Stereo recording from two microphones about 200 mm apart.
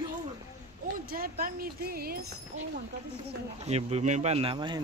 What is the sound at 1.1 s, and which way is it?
Speech, 45° right (ahead or behind).